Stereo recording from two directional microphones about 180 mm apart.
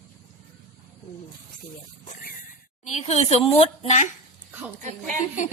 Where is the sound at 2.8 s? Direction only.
35° left (ahead or behind).